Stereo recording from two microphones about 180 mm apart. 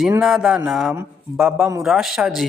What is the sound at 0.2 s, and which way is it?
Speech, 5° right (ahead or behind).